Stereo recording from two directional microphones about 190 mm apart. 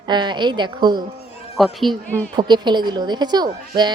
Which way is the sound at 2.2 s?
20° right (ahead or behind).